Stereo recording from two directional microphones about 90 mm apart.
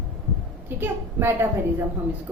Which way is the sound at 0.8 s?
25° right (ahead or behind).